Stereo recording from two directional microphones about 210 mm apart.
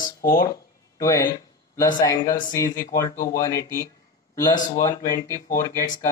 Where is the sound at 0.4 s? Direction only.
15° left (ahead or behind).